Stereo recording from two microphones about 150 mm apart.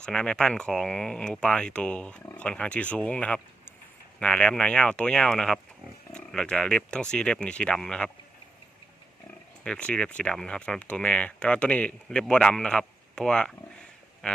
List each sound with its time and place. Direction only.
0.0 s speech: 5° left (ahead or behind)
9.6 s speech: 5° left (ahead or behind)